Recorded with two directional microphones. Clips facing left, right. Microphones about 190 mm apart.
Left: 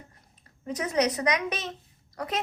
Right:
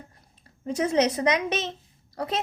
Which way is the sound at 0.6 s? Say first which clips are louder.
Right 4 dB; 30° right (ahead or behind).